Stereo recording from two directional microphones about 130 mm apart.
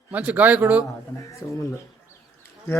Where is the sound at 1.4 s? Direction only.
25° left (ahead or behind).